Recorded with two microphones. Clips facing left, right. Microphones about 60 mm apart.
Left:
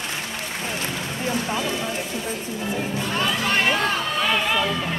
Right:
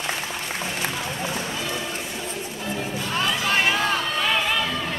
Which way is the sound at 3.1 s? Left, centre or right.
Centre.